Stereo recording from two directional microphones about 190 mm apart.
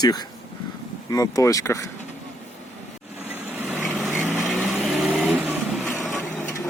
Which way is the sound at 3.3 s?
10° right (ahead or behind).